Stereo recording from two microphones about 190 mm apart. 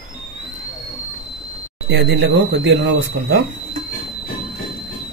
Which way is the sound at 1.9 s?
65° right (ahead or behind).